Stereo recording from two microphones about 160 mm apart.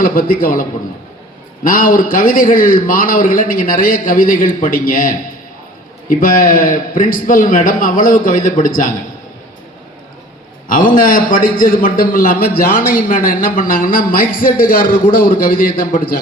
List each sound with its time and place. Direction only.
0.0 s a man's voice: 60° left (ahead or behind)
1.6 s a man's voice: 60° left (ahead or behind)
10.7 s a man's voice: 60° left (ahead or behind)